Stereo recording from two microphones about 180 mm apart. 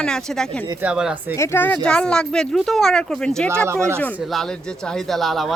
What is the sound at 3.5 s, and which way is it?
Speech, 15° right (ahead or behind).